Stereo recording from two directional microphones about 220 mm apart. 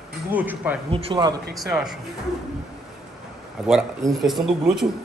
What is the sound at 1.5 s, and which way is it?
Speech, centre (ahead or behind).